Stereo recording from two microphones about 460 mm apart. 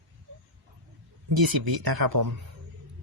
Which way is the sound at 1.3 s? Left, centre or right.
Right.